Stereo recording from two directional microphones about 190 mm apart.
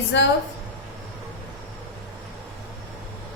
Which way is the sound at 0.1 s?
75° left (ahead or behind).